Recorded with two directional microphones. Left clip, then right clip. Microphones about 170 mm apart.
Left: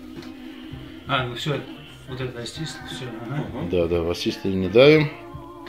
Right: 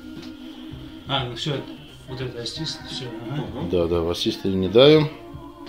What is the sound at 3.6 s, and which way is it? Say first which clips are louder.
Speech: even; 10° right (ahead or behind).